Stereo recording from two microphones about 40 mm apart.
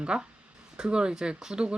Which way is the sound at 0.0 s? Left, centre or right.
Centre.